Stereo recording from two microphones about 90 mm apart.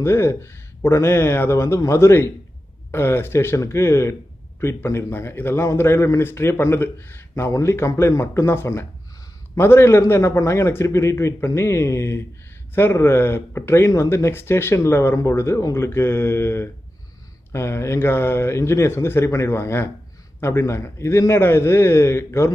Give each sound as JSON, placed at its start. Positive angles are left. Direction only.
{"t": 0.0, "sound": "a man's voice", "side_deg": 30}